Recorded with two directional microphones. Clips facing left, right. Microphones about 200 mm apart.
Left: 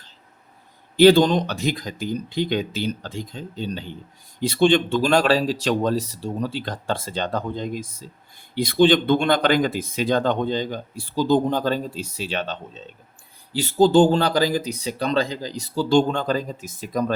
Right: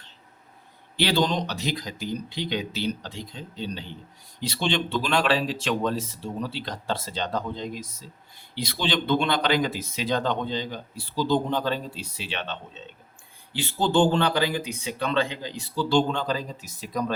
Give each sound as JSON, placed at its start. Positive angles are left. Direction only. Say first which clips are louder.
{"t": 0.9, "sound": "speech", "louder": "left 10 dB", "side_deg": 45}